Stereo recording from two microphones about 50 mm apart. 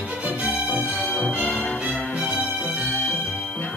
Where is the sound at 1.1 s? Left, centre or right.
Left.